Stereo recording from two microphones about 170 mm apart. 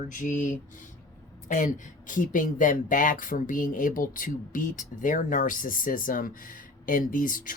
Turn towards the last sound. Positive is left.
turn(degrees=55)  # may be behind; listen again after turning